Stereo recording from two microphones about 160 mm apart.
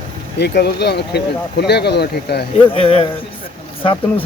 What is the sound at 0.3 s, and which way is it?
Speech, 90° left.